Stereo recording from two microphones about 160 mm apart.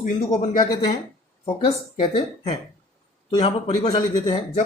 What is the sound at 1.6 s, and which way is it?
Speech, 30° left (ahead or behind).